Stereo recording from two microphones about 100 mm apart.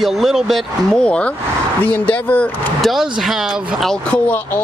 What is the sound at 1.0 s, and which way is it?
Speech, 10° left (ahead or behind).